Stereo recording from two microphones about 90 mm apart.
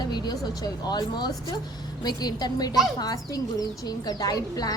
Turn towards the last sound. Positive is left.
turn(degrees=45)  # may be behind; listen again after turning